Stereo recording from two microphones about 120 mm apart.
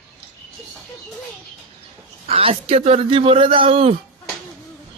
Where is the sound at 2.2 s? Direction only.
50° right (ahead or behind).